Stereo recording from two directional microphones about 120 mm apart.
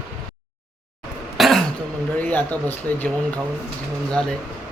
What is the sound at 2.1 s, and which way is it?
Speech, 15° left (ahead or behind).